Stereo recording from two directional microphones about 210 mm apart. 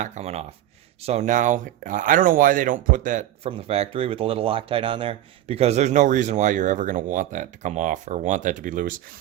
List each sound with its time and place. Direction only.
0.0 s speech: 35° right (ahead or behind)